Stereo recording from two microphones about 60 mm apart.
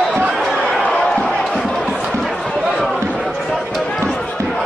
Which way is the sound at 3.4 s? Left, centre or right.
Centre.